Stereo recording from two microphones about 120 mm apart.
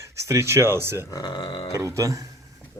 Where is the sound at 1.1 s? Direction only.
35° left (ahead or behind).